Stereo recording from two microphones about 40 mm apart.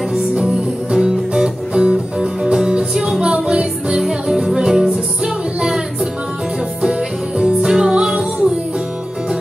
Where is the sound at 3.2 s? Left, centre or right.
Right.